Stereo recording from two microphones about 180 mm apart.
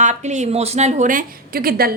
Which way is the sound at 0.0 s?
40° right (ahead or behind).